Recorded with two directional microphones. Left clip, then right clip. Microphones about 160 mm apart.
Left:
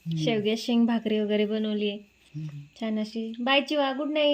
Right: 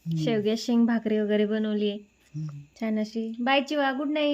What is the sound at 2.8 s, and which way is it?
A woman's voice, centre (ahead or behind).